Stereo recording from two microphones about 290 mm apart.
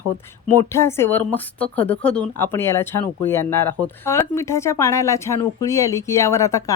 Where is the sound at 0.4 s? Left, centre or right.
Centre.